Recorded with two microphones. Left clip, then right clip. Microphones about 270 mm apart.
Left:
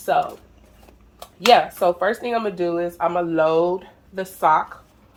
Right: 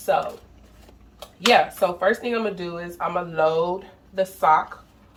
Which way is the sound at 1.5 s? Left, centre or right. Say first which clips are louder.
Left 3 dB; left.